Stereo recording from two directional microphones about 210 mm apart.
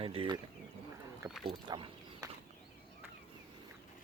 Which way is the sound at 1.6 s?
20° right (ahead or behind).